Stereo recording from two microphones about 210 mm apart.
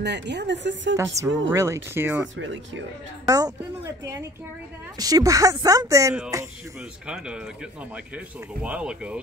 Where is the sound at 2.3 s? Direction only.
65° right (ahead or behind).